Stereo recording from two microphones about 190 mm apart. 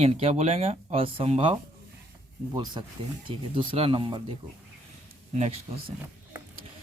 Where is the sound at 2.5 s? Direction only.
25° right (ahead or behind).